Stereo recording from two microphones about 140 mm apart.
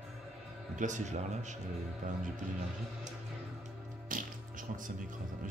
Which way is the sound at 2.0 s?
70° right (ahead or behind).